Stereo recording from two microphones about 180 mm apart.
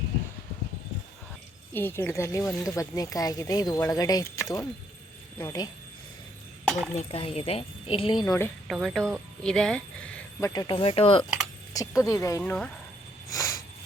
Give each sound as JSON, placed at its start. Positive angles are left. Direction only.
{"t": 1.7, "sound": "speech", "side_deg": 10}
{"t": 6.9, "sound": "speech", "side_deg": 35}
{"t": 8.6, "sound": "speech", "side_deg": 0}
{"t": 10.5, "sound": "speech", "side_deg": 25}
{"t": 11.7, "sound": "speech", "side_deg": 20}
{"t": 12.4, "sound": "speech", "side_deg": 5}
{"t": 13.3, "sound": "a sound", "side_deg": 15}